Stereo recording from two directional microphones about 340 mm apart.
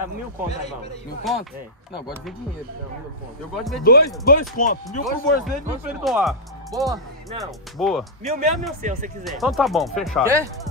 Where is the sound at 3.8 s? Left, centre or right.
Left.